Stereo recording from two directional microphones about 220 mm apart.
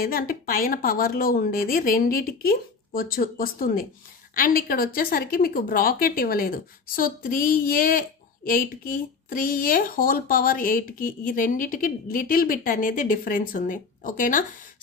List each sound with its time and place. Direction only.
0.0 s speech: 40° left (ahead or behind)